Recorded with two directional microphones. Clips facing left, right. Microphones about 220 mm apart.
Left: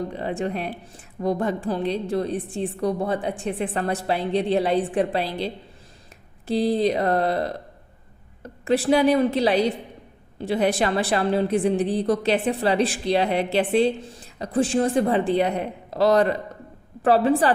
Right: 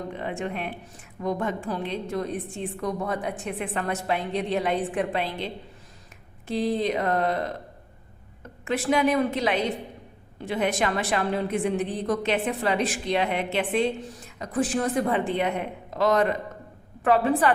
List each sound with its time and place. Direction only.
0.1 s a woman's voice: 35° left (ahead or behind)
6.5 s a woman's voice: 35° left (ahead or behind)
8.6 s a woman's voice: 35° left (ahead or behind)